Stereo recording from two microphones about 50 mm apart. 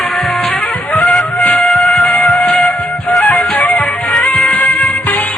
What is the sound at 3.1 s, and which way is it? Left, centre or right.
Flute, centre.